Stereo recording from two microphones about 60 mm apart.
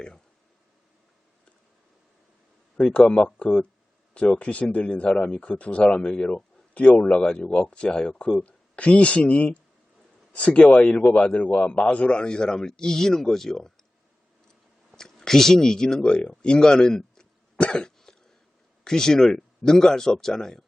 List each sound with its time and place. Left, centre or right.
2.7 s a man's voice: centre
14.9 s speech: centre
16.0 s cough: centre
18.9 s a man's voice: centre